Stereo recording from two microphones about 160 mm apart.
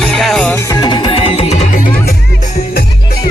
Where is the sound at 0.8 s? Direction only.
35° left (ahead or behind); by 3.3 s 75° left (ahead or behind).